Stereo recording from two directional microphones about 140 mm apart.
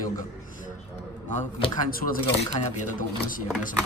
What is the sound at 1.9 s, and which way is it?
Speech, 90° left.